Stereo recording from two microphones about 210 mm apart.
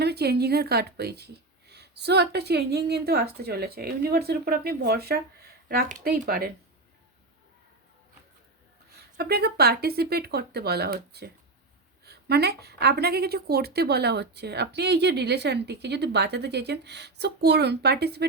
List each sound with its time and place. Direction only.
0.0 s a woman's voice: 50° right (ahead or behind)
9.1 s a woman's voice: 50° right (ahead or behind)